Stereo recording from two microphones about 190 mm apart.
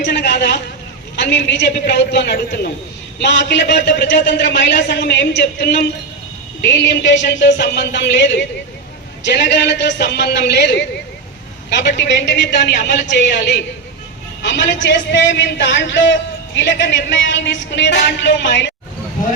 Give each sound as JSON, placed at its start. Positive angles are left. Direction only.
{"t": 0.0, "sound": "a sound", "side_deg": 65}
{"t": 1.1, "sound": "a man's voice", "side_deg": 65}
{"t": 3.2, "sound": "a man's voice", "side_deg": 70}